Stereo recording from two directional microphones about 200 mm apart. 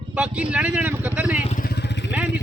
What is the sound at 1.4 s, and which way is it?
Vehicle, 45° left (ahead or behind).